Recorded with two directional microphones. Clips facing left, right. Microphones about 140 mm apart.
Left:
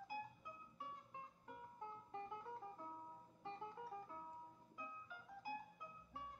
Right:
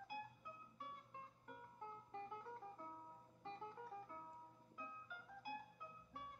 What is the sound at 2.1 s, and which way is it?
Music, 20° left (ahead or behind).